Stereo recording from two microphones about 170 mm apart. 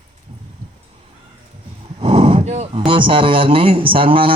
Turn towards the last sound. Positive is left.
turn(degrees=-30)  # may be behind; listen again after turning